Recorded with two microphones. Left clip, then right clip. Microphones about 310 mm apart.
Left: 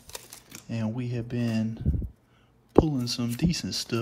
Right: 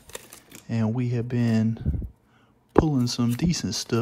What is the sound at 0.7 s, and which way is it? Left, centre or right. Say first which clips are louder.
Speech: right 5 dB; right.